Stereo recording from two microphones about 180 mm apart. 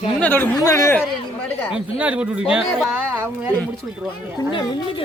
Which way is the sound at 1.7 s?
5° right (ahead or behind).